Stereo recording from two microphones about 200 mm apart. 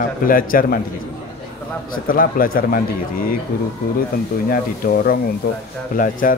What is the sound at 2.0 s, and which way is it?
Speech, 45° left (ahead or behind).